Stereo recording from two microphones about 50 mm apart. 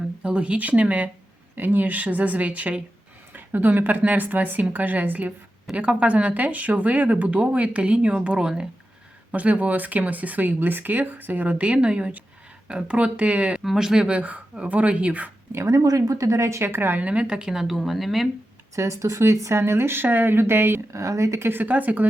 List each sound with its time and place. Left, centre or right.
0.2 s speech: right
1.5 s speech: right
5.7 s speech: right
9.3 s speech: right
13.7 s speech: centre
14.1 s speech: right
15.5 s speech: right
17.0 s speech: right; by 18.3 s centre
18.8 s speech: right
20.9 s speech: right
21.6 s speech: right